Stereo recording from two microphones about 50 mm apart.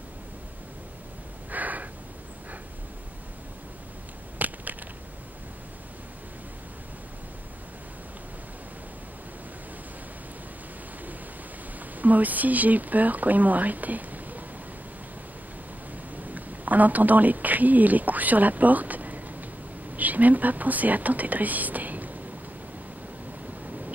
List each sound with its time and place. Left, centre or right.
1.5 s a sound: right
4.4 s crushing: right
11.8 s speech: right
16.2 s speech: right